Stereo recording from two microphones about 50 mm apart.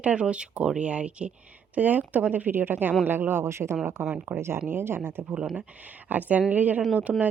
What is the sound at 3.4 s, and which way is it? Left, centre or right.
Speech, right.